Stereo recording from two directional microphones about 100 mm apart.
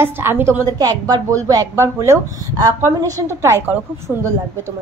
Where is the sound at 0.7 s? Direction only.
40° right (ahead or behind).